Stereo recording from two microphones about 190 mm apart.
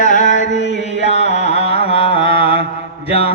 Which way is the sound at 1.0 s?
35° left (ahead or behind).